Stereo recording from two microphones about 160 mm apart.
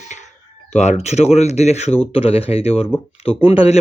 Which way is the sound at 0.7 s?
45° left (ahead or behind).